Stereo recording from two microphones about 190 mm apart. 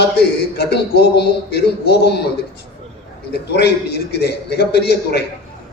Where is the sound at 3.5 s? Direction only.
60° left (ahead or behind).